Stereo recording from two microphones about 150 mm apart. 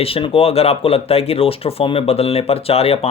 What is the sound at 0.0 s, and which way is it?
Speech, 35° left (ahead or behind).